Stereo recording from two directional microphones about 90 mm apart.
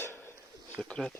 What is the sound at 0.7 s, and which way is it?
Speech, 10° left (ahead or behind).